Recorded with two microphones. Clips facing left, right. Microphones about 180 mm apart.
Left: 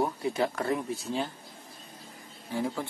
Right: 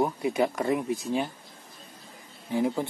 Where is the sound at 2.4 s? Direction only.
20° right (ahead or behind).